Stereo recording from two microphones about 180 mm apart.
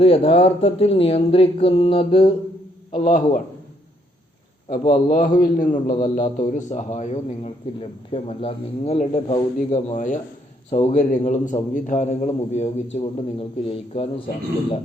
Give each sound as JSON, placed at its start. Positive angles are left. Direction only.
{"t": 0.0, "sound": "a man's voice", "side_deg": 30}
{"t": 3.0, "sound": "a man's voice", "side_deg": 45}
{"t": 4.7, "sound": "a man's voice", "side_deg": 45}